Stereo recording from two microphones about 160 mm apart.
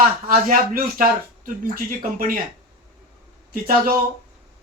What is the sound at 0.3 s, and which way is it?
Speech, 60° right (ahead or behind).